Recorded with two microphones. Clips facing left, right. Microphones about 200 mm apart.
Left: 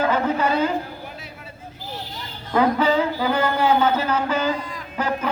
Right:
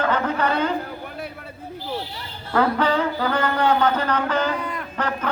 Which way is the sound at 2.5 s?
10° left (ahead or behind).